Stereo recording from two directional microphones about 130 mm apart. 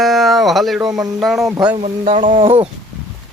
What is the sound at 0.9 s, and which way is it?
Speech, 30° right (ahead or behind).